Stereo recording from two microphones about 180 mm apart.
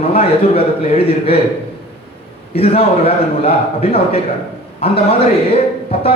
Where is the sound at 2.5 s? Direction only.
35° left (ahead or behind).